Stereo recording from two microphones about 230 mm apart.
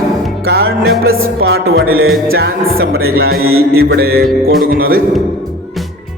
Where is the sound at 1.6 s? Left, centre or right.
Right.